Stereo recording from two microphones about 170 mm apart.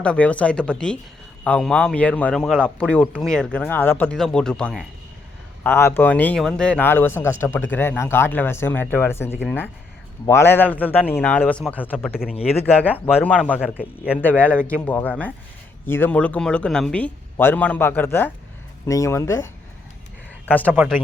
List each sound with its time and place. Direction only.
0.0 s a man's voice: 5° left (ahead or behind)
5.6 s a man's voice: 15° left (ahead or behind)
12.3 s speech: 35° left (ahead or behind)
12.8 s speech: 10° right (ahead or behind)
13.1 s a man's voice: 10° left (ahead or behind)
13.6 s speech: 5° right (ahead or behind)
14.2 s a man's voice: 10° left (ahead or behind)
20.5 s a man's voice: 10° left (ahead or behind)